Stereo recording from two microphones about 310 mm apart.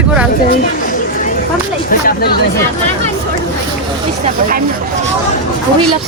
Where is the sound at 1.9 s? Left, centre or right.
Left.